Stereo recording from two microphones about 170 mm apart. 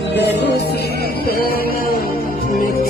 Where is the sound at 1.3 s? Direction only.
60° left (ahead or behind).